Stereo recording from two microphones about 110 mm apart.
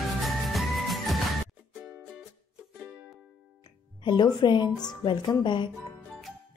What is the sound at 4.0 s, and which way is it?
Speech, 45° left (ahead or behind).